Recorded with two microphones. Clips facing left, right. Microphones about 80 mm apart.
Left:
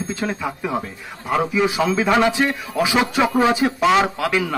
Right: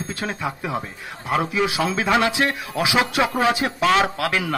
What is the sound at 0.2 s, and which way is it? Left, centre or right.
A man's voice, centre.